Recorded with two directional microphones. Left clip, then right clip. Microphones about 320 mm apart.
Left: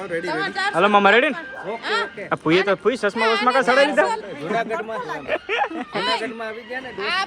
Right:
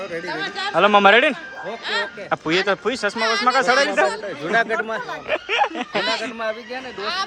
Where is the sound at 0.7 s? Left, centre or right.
Centre.